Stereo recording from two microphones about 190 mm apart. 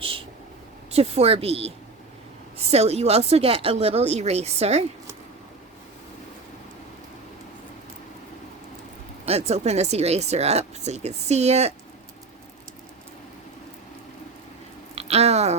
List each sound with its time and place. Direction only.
0.0 s a sound: 30° right (ahead or behind)
0.9 s speech: 30° right (ahead or behind)
9.2 s speech: 35° right (ahead or behind)
14.9 s speech: 35° right (ahead or behind)